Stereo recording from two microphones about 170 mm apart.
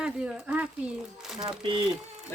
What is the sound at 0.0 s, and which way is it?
Speech, 5° right (ahead or behind).